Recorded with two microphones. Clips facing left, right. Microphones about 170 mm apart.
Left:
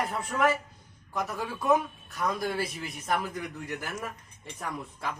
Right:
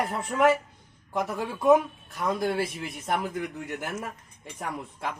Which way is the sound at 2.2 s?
25° right (ahead or behind).